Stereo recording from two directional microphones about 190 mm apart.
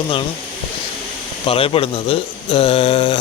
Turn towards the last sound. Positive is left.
turn(degrees=30)  # may be behind; listen again after turning